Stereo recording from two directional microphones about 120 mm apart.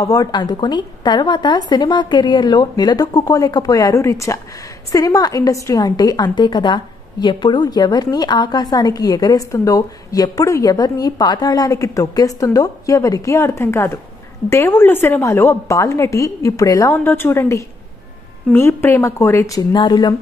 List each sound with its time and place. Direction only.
0.0 s a woman's voice: 30° left (ahead or behind)
19.7 s a woman's voice: 35° left (ahead or behind)